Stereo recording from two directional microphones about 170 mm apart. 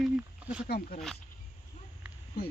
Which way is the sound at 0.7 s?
60° left (ahead or behind).